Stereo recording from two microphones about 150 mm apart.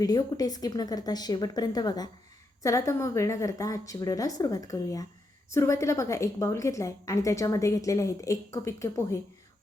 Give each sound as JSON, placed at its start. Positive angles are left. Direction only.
{"t": 0.0, "sound": "a woman's voice", "side_deg": 25}